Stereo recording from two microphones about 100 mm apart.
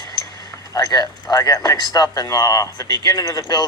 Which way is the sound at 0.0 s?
45° left (ahead or behind).